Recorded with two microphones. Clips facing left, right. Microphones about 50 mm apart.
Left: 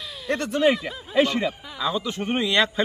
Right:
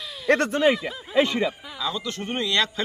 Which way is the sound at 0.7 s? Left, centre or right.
Centre.